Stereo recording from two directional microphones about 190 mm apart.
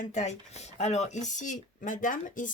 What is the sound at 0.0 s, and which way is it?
Speech, 40° left (ahead or behind).